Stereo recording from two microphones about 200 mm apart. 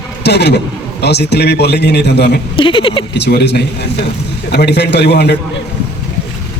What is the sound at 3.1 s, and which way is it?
A man's voice, 55° left (ahead or behind).